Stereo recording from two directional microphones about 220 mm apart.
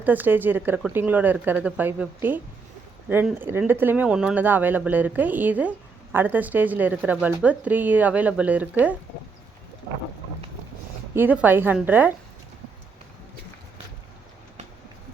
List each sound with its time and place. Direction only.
0.0 s speech: 10° right (ahead or behind)
11.1 s speech: 10° right (ahead or behind)